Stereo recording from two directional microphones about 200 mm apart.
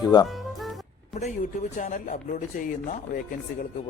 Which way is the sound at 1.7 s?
40° left (ahead or behind).